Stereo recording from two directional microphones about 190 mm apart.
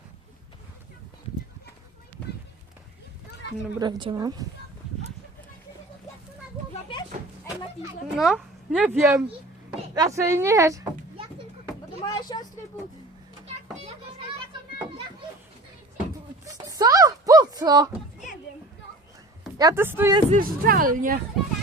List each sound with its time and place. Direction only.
3.8 s speech: 25° right (ahead or behind)
8.2 s a woman's voice: centre (ahead or behind)
12.0 s a sound: 20° left (ahead or behind)
16.6 s a sound: 20° right (ahead or behind)
19.5 s speech: 15° right (ahead or behind)
20.3 s speech: 50° right (ahead or behind)